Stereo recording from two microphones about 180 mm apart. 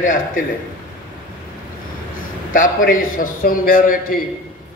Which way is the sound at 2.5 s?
50° left (ahead or behind).